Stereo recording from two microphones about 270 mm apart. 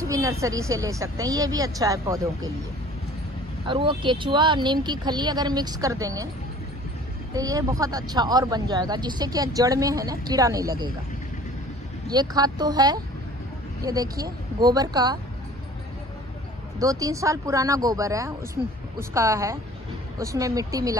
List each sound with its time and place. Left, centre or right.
0.1 s speech: centre
3.6 s speech: centre
7.3 s speech: centre
12.1 s speech: centre
16.8 s speech: centre